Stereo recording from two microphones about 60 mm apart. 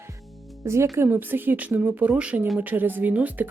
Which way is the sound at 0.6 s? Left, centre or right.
Right.